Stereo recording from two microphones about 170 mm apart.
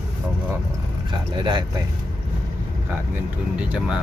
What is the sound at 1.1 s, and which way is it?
Speech, 25° right (ahead or behind).